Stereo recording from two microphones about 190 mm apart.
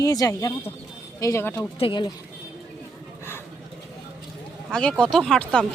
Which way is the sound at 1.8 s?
25° left (ahead or behind).